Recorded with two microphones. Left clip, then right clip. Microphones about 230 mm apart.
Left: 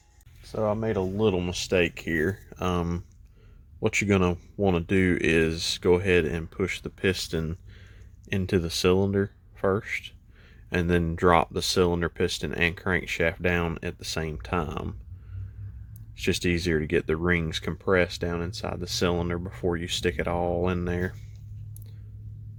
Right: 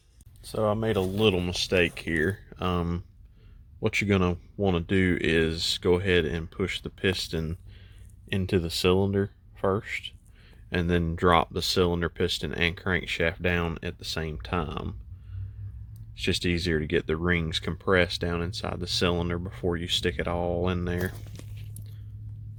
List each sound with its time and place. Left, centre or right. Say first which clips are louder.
0.4 s speech: right 1 dB; centre
16.1 s speech: left 1 dB; centre
21.3 s a sound: right 9 dB; right